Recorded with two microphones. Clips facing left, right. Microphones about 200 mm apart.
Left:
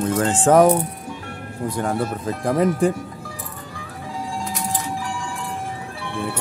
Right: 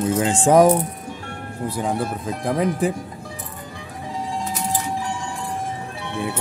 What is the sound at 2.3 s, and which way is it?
Speech, centre (ahead or behind).